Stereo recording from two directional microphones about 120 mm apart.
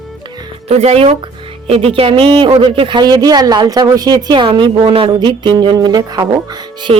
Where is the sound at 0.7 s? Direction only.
60° right (ahead or behind); by 6.9 s 35° right (ahead or behind).